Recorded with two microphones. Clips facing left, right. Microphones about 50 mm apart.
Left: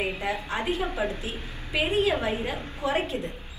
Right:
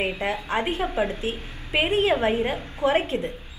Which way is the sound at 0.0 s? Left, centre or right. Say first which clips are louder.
Right 3 dB; right.